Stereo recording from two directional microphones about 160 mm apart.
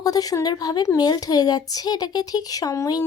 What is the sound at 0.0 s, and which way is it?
A woman's voice, 25° left (ahead or behind).